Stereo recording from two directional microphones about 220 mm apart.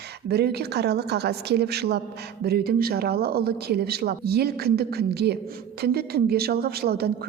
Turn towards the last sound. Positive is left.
turn(degrees=-45)  # may be behind; listen again after turning